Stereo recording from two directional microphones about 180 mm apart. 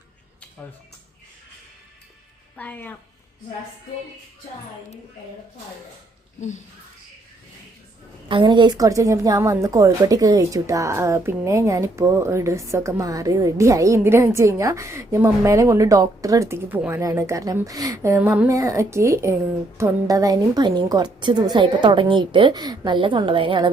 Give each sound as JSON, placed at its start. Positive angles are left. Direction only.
{"t": 2.6, "sound": "a woman's voice", "side_deg": 10}
{"t": 8.3, "sound": "a woman's voice", "side_deg": -25}